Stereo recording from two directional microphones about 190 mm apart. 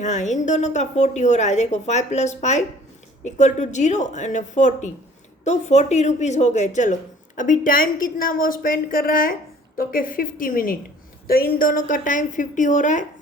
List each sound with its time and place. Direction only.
0.0 s a woman's voice: 40° left (ahead or behind)